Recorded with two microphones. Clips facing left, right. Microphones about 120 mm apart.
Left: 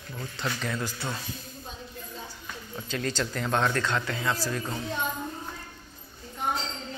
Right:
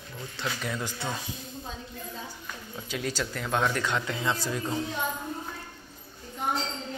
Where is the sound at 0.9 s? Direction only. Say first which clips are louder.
Right 1 dB; 20° right (ahead or behind).